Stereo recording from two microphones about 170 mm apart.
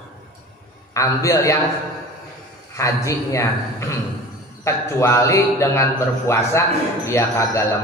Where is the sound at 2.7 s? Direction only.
15° left (ahead or behind).